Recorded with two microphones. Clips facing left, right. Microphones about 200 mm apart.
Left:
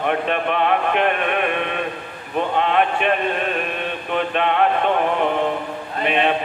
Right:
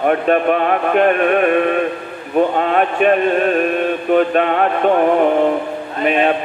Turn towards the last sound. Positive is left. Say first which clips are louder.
# right 4 dB
turn(degrees=-45)  # may be behind; listen again after turning